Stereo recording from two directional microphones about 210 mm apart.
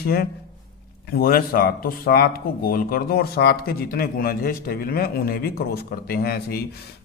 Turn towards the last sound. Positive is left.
turn(degrees=45)  # may be behind; listen again after turning